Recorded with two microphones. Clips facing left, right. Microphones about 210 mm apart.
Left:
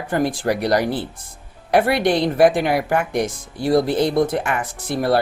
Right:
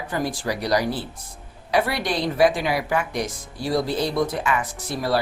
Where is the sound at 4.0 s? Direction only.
25° left (ahead or behind).